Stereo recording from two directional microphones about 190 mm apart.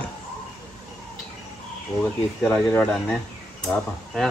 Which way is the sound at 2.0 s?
10° left (ahead or behind).